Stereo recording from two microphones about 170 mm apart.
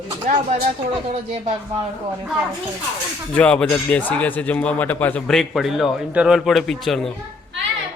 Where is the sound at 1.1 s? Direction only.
40° right (ahead or behind).